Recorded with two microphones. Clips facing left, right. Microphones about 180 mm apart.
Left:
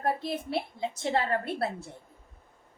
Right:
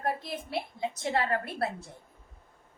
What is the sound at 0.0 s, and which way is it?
A woman's voice, 30° left (ahead or behind).